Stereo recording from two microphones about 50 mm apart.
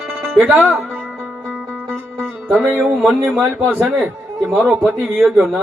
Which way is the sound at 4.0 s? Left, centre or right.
Centre.